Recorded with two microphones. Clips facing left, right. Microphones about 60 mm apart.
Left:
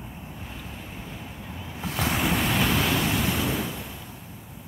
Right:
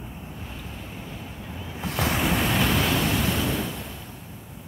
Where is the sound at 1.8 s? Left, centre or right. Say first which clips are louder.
Right 1 dB; centre.